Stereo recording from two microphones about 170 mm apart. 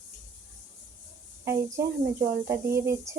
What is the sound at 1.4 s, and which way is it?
A woman's voice, 15° right (ahead or behind).